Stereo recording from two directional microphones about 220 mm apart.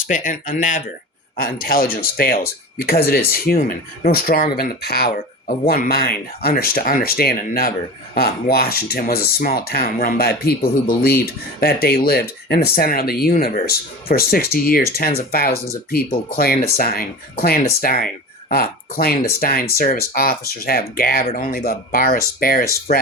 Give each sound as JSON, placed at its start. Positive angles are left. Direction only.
{"t": 0.1, "sound": "speech", "side_deg": 35}
{"t": 16.7, "sound": "speech", "side_deg": 40}